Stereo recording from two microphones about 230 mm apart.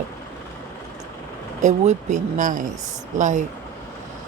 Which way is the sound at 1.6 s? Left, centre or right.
Right.